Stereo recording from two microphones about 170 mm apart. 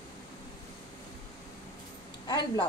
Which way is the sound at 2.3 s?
25° left (ahead or behind).